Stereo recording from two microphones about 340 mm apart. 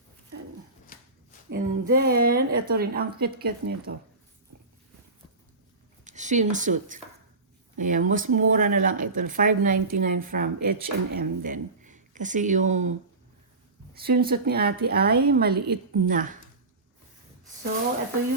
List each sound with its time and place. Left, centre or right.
0.9 s a sound: left
1.5 s speech: right
6.1 s speech: right
14.0 s speech: right